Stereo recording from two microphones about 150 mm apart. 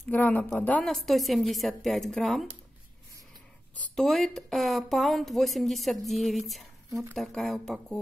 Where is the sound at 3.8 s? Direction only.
5° left (ahead or behind).